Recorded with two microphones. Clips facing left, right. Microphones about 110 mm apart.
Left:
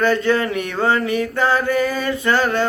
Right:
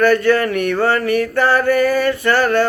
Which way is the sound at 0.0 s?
20° left (ahead or behind).